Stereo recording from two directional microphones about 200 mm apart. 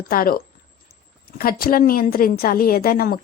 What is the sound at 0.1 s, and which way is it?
A woman's voice, 45° left (ahead or behind).